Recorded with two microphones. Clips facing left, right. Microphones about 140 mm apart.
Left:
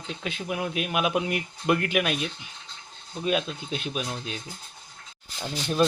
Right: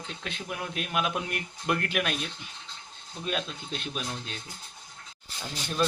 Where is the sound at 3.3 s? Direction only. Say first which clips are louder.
Left 6 dB; 5° left (ahead or behind).